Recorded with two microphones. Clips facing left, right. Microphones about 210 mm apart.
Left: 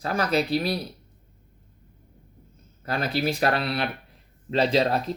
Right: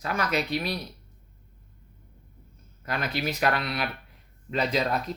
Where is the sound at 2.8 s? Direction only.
30° left (ahead or behind).